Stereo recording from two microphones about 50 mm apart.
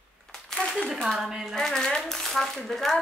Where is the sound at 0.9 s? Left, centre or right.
Centre.